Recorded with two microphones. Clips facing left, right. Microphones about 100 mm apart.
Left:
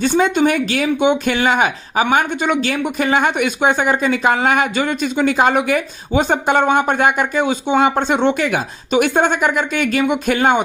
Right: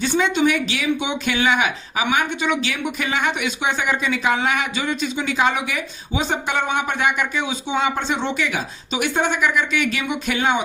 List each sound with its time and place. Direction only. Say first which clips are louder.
0.0 s speech: left 4 dB; 50° left (ahead or behind)